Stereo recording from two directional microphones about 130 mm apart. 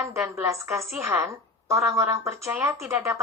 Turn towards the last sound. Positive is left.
turn(degrees=-20)  # may be behind; listen again after turning